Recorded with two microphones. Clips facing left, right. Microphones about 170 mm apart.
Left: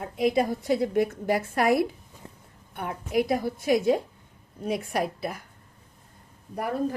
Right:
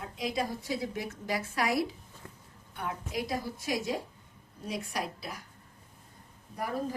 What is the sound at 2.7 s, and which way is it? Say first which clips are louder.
A woman's voice: left 9 dB; 60° left (ahead or behind).